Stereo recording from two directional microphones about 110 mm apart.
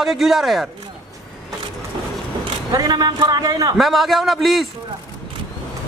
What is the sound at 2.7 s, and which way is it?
Speech, 40° right (ahead or behind).